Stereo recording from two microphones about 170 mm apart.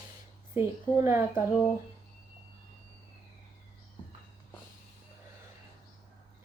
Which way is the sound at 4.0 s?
30° left (ahead or behind).